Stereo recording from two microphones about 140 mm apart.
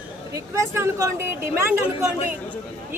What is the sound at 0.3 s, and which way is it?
A man's voice, 20° right (ahead or behind).